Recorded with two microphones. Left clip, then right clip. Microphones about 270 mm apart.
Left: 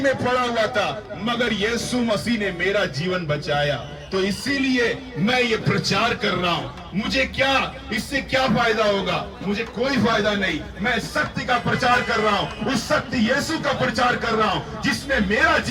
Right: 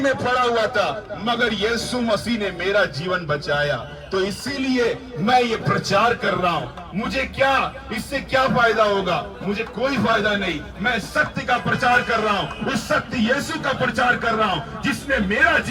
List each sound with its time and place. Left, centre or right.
0.3 s a man's voice: centre
7.3 s a man's voice: centre